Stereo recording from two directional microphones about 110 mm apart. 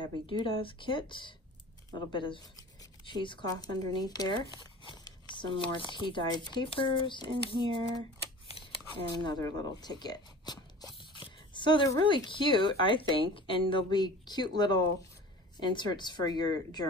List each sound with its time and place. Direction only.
0.3 s speech: 50° left (ahead or behind)
8.5 s shuffling cards: 60° left (ahead or behind)
9.1 s a woman's voice: 40° left (ahead or behind)